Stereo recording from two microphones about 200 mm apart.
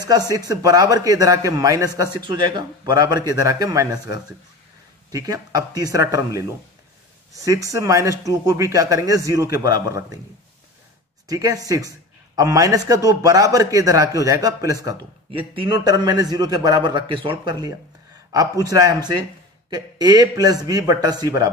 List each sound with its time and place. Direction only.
0.0 s a man's voice: 20° right (ahead or behind)
11.2 s a man's voice: 15° right (ahead or behind)